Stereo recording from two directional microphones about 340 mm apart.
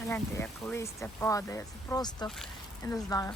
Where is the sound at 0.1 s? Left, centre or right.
Centre.